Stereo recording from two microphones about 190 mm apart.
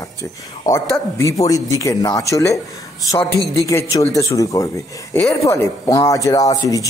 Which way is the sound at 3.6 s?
15° left (ahead or behind).